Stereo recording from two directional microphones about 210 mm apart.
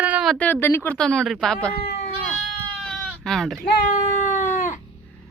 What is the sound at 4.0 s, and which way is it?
Cat, 35° left (ahead or behind).